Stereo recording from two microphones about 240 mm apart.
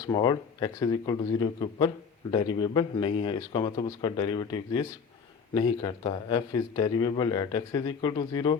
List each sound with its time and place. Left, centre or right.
0.0 s speech: centre